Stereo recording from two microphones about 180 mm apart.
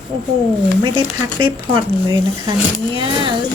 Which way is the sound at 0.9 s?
25° right (ahead or behind).